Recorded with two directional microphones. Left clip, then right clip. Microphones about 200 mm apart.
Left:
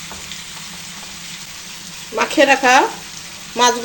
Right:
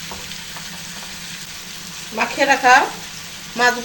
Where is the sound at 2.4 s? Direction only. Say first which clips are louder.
Right 1 dB; 50° left (ahead or behind).